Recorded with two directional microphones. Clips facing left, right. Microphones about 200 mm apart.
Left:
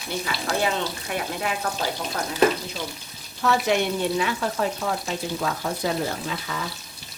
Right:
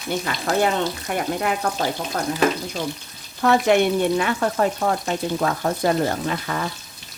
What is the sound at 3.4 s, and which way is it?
Frying, 55° right (ahead or behind).